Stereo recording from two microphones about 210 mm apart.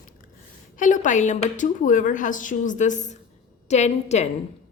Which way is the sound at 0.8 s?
35° left (ahead or behind).